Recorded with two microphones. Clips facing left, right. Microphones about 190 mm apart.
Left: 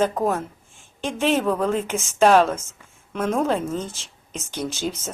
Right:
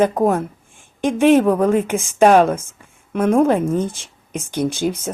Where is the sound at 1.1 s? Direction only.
55° right (ahead or behind).